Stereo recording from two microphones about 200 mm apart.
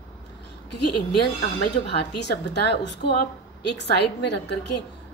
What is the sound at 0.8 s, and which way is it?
Speech, 55° left (ahead or behind).